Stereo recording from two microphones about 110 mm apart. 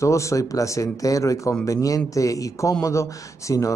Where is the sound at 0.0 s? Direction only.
25° left (ahead or behind).